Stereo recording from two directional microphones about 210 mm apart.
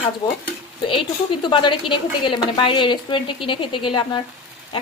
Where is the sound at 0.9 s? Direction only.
25° left (ahead or behind).